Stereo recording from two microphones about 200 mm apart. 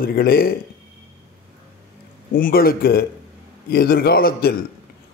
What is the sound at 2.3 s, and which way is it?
Speech, 45° left (ahead or behind).